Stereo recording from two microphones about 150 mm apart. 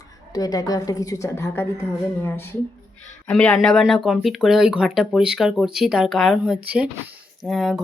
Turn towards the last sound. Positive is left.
turn(degrees=0)  # may be behind; listen again after turning